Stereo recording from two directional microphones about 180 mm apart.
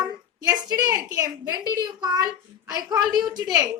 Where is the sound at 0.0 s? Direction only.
20° right (ahead or behind).